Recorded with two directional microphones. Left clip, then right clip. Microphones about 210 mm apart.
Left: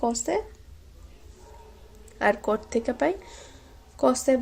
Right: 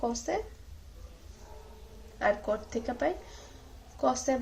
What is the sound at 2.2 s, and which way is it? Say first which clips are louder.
A woman's voice: left 5 dB; 50° left (ahead or behind).